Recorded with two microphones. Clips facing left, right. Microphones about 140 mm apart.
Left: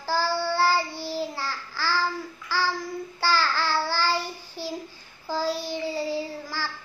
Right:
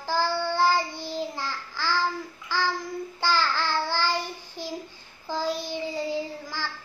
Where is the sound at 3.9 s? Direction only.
15° right (ahead or behind).